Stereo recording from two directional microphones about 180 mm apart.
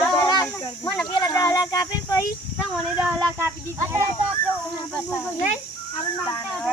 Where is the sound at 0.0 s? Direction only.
25° left (ahead or behind).